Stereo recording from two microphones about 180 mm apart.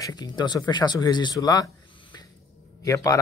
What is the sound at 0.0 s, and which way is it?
Speech, 25° left (ahead or behind).